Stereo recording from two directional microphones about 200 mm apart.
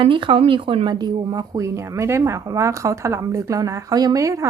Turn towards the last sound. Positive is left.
turn(degrees=-15)  # may be behind; listen again after turning